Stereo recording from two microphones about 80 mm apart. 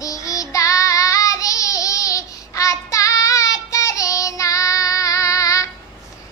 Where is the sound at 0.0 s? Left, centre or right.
Left.